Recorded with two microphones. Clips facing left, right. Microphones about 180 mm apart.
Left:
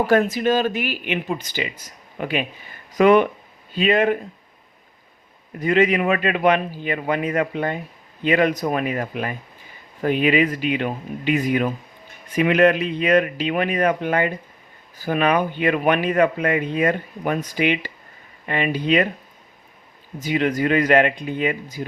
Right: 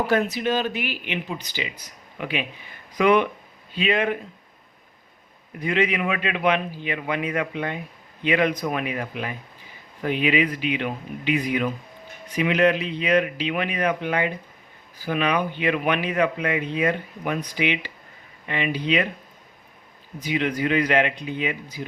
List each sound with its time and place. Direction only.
0.1 s speech: 45° left (ahead or behind)
5.5 s speech: 45° left (ahead or behind)
20.1 s speech: 45° left (ahead or behind)